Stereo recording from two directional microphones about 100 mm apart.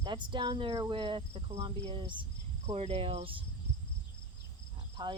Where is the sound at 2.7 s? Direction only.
90° right; by 3.4 s 75° right (ahead or behind).